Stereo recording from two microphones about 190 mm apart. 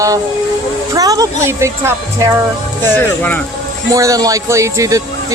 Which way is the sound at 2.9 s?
10° left (ahead or behind).